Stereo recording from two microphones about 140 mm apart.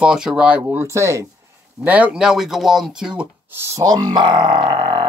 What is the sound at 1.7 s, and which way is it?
Speech, 10° right (ahead or behind).